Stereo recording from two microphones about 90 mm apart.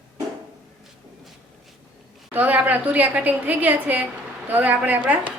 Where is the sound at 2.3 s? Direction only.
20° right (ahead or behind).